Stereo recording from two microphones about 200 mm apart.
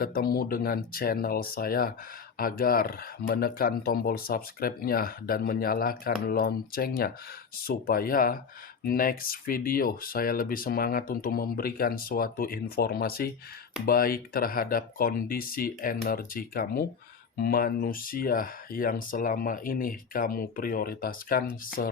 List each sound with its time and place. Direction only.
0.0 s speech: 50° left (ahead or behind)